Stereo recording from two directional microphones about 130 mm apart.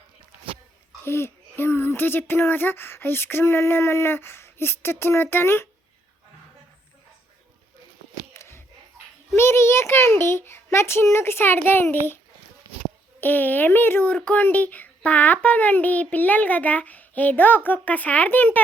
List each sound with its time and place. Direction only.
1.0 s a child's voice: 20° left (ahead or behind)
8.3 s a sound: 20° left (ahead or behind)
9.3 s a child's voice: 20° left (ahead or behind)